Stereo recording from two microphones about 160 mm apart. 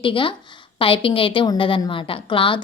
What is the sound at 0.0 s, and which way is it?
A woman's voice, 30° left (ahead or behind).